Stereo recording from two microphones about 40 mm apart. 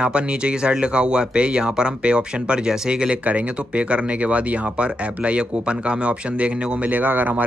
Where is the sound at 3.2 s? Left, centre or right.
Right.